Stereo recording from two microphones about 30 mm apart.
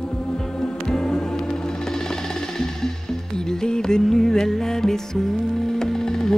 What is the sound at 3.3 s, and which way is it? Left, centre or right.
Music, left.